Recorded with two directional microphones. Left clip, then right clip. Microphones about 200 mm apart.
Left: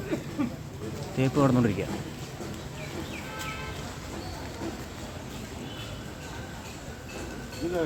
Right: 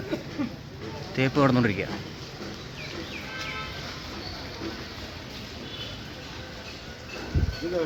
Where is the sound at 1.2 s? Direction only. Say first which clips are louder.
Right 2 dB; 5° right (ahead or behind).